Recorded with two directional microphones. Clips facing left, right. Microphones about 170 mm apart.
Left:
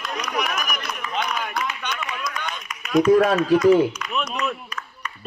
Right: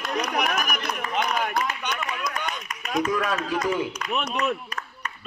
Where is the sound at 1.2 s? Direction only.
45° right (ahead or behind).